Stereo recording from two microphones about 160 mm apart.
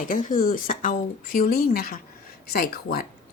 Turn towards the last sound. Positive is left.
turn(degrees=70)  # may be behind; listen again after turning